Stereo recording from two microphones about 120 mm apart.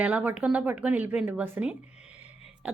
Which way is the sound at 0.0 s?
10° right (ahead or behind).